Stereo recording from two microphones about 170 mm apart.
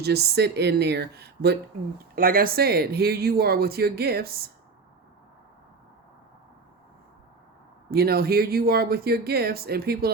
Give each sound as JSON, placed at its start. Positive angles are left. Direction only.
{"t": 0.0, "sound": "speech", "side_deg": -70}
{"t": 2.1, "sound": "speech", "side_deg": -60}
{"t": 7.9, "sound": "speech", "side_deg": -65}